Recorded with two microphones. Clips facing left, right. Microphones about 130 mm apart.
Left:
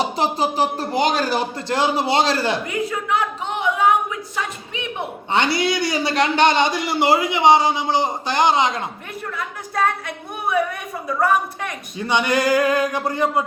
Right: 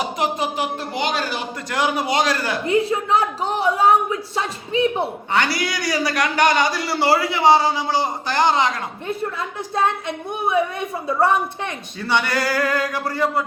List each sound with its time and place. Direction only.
0.0 s speech: 30° left (ahead or behind)
1.7 s a man's voice: 25° left (ahead or behind)
2.6 s a woman's voice: 30° right (ahead or behind)
5.3 s a man's voice: 25° left (ahead or behind)
9.0 s a woman's voice: 25° right (ahead or behind)
11.9 s a man's voice: 20° left (ahead or behind)